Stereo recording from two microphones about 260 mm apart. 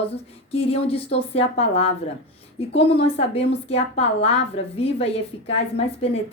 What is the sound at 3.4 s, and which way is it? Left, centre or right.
A woman's voice, left.